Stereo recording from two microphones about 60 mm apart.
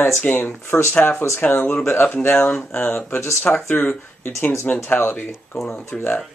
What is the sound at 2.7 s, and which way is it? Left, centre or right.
Speech, left.